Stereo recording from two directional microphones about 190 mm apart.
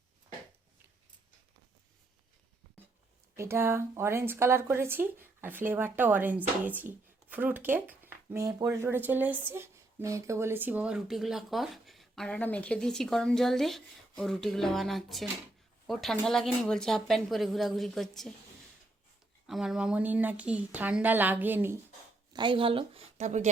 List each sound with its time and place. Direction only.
3.3 s speech: 15° right (ahead or behind)
19.5 s speech: centre (ahead or behind)
22.3 s a woman's voice: 25° right (ahead or behind)